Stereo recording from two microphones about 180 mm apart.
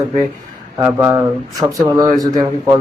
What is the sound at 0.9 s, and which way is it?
Speech, 15° right (ahead or behind).